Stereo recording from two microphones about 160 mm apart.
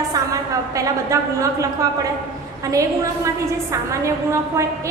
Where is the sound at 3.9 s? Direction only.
20° right (ahead or behind).